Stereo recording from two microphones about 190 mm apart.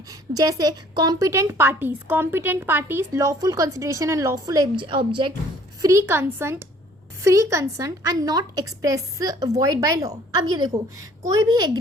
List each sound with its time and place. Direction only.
0.1 s a woman's voice: 20° right (ahead or behind)